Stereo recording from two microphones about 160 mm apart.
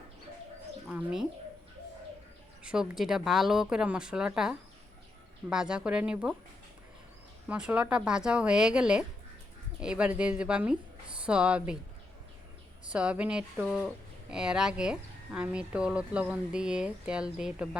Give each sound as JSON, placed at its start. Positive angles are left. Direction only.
{"t": 0.9, "sound": "speech", "side_deg": -5}
{"t": 2.6, "sound": "speech", "side_deg": -5}
{"t": 7.4, "sound": "speech", "side_deg": -10}
{"t": 12.9, "sound": "speech", "side_deg": -5}